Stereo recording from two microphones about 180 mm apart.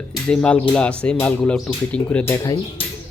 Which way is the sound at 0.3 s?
5° left (ahead or behind).